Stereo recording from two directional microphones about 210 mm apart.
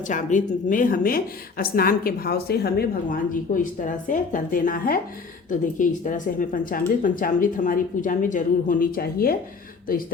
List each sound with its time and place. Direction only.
0.1 s a woman's voice: 35° left (ahead or behind)